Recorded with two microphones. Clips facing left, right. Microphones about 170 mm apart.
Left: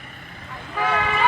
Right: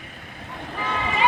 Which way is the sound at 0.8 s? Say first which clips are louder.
Left 5 dB; 85° left.